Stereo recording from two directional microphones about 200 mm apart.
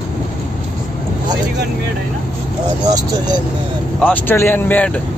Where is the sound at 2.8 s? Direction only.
20° right (ahead or behind).